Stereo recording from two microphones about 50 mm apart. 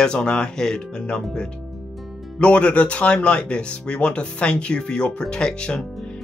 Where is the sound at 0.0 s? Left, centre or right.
Centre.